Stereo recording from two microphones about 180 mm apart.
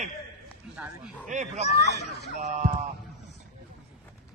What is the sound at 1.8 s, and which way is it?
Speech, 65° left (ahead or behind).